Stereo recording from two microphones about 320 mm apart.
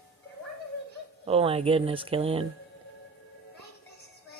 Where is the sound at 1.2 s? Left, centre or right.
Centre.